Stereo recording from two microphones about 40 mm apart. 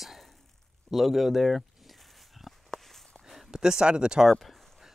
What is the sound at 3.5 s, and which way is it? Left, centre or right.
Speech, centre.